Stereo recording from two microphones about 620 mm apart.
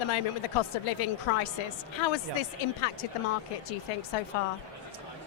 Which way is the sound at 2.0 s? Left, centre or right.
Left.